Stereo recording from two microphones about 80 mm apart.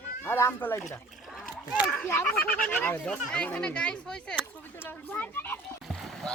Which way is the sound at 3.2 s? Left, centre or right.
Centre.